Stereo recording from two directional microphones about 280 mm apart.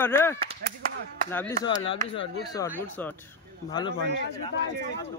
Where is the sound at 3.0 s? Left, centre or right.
Centre.